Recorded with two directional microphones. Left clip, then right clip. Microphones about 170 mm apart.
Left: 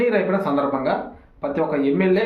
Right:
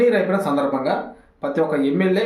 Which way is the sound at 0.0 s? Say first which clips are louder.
Right 2 dB; 15° right (ahead or behind).